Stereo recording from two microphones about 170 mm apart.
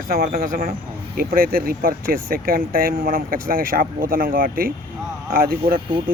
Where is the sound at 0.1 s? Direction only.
55° right (ahead or behind).